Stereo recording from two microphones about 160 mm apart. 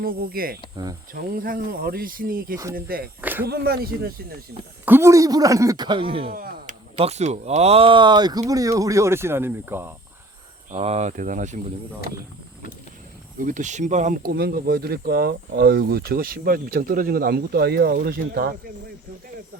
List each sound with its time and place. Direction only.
0.0 s speech: 70° right (ahead or behind)
3.2 s speech: 10° right (ahead or behind)
3.4 s speech: 75° right (ahead or behind)
4.9 s speech: 15° right (ahead or behind); by 6.3 s 35° right (ahead or behind)
6.3 s speech: 55° right (ahead or behind); by 9.9 s 15° right (ahead or behind)
10.7 s speech: 40° right (ahead or behind)
13.4 s speech: 50° right (ahead or behind); by 18.5 s 75° right (ahead or behind)